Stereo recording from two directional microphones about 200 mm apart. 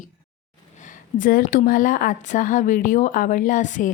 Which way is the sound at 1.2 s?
45° left (ahead or behind).